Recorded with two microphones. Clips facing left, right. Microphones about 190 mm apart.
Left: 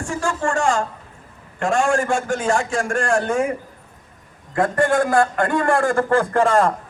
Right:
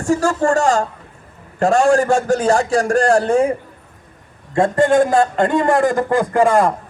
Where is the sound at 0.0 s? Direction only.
40° right (ahead or behind).